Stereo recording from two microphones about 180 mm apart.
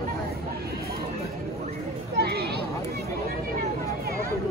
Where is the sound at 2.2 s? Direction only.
65° right (ahead or behind).